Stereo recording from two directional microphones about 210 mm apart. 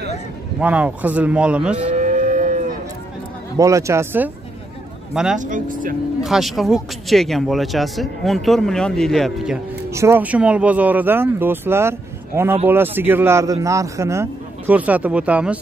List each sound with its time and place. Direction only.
0.6 s a man's voice: 5° right (ahead or behind)
1.9 s moo: 35° right (ahead or behind)
3.5 s a man's voice: 15° right (ahead or behind)
5.4 s speech: 40° right (ahead or behind)
6.2 s a man's voice: centre (ahead or behind)